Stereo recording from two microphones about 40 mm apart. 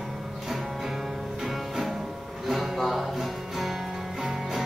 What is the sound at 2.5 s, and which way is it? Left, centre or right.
Music, centre.